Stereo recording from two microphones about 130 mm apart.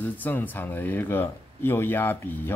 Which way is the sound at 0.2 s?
15° left (ahead or behind).